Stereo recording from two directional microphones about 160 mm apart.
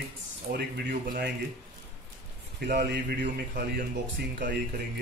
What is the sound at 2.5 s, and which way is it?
Speech, 85° right.